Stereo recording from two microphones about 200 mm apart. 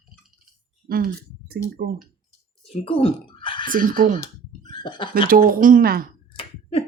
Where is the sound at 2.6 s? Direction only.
30° left (ahead or behind).